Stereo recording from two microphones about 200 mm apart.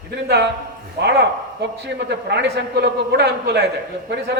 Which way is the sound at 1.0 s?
55° right (ahead or behind).